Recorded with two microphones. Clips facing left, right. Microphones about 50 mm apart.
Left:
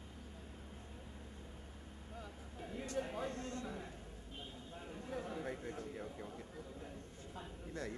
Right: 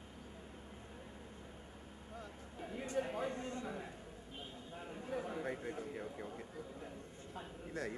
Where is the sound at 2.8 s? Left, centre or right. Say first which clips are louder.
Right 3 dB; centre.